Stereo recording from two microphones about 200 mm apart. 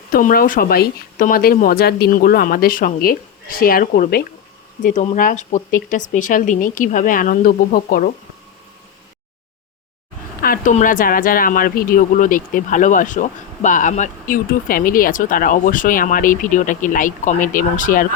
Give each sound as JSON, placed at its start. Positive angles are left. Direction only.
{"t": 0.1, "sound": "speech", "side_deg": 45}
{"t": 10.4, "sound": "speech", "side_deg": 45}